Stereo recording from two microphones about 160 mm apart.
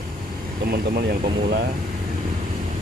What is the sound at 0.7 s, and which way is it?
Speech, 70° right (ahead or behind).